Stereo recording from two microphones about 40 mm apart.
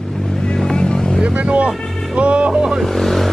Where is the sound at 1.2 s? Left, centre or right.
Right.